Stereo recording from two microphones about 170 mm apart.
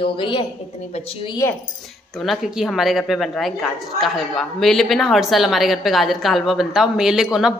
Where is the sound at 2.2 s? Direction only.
Centre (ahead or behind).